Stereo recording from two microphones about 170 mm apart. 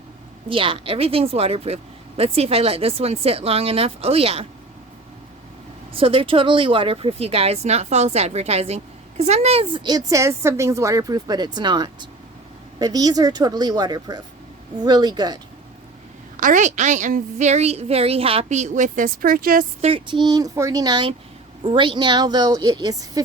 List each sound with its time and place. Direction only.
0.4 s speech: 30° right (ahead or behind)
5.9 s speech: 30° right (ahead or behind)
10.1 s speech: 15° right (ahead or behind)
16.4 s a woman's voice: 50° right (ahead or behind)
19.8 s speech: 30° right (ahead or behind)